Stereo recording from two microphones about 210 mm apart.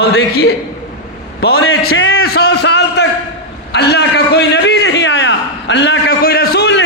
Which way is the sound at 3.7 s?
55° left (ahead or behind).